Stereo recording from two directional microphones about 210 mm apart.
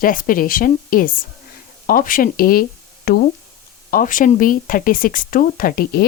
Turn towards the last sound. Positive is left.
turn(degrees=45)  # may be behind; listen again after turning